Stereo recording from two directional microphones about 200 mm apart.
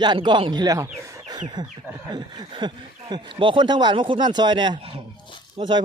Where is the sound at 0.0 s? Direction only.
25° right (ahead or behind).